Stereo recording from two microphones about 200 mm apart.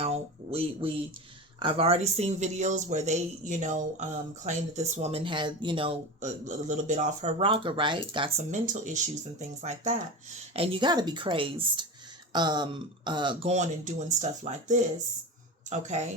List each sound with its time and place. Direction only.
0.0 s speech: 30° right (ahead or behind)
8.4 s speech: 40° right (ahead or behind)